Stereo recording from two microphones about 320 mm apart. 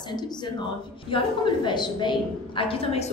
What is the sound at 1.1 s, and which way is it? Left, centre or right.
A woman's voice, centre.